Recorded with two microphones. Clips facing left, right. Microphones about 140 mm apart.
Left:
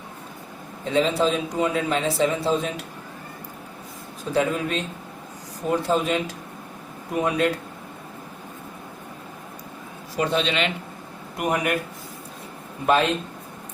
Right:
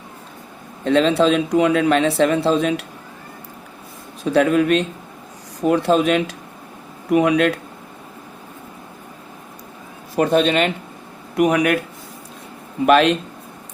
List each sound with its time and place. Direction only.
0.9 s a man's voice: 70° right (ahead or behind)
4.3 s a man's voice: 70° right (ahead or behind)
10.2 s speech: 50° right (ahead or behind)
11.3 s speech: 80° right
12.8 s a man's voice: 75° right (ahead or behind)